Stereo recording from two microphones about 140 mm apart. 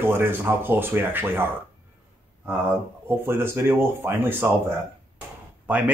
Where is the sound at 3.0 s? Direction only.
15° right (ahead or behind).